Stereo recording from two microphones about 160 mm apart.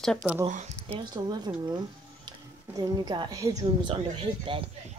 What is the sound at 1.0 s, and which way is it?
A woman's voice, 25° right (ahead or behind).